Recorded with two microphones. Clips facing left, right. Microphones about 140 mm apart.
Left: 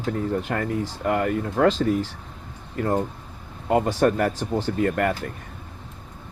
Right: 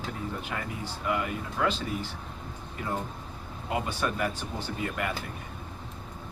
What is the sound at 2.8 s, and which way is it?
Speech, 70° left (ahead or behind).